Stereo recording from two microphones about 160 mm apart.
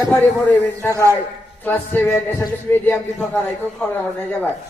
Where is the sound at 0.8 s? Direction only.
20° left (ahead or behind).